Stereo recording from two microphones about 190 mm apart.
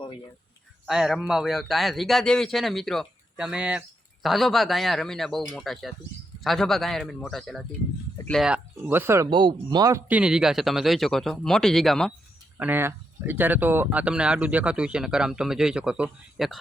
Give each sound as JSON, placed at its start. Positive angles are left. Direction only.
{"t": 0.9, "sound": "a man's voice", "side_deg": 0}
{"t": 9.3, "sound": "speech", "side_deg": -25}
{"t": 10.1, "sound": "a man's voice", "side_deg": -5}
{"t": 12.5, "sound": "a man's voice", "side_deg": -10}